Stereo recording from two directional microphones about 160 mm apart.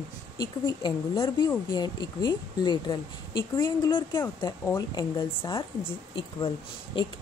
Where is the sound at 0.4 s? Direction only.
25° left (ahead or behind).